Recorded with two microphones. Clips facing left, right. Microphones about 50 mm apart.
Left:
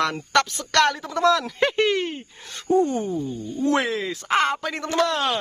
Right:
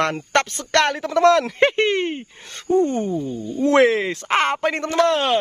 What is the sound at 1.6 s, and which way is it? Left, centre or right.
Speech, right.